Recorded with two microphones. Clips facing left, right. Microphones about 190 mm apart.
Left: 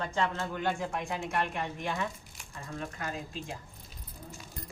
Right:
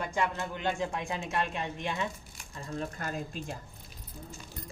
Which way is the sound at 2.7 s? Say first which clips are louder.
Right 2 dB; 40° right (ahead or behind).